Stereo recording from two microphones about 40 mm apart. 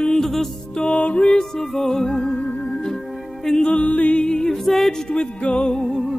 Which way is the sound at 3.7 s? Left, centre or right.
Left.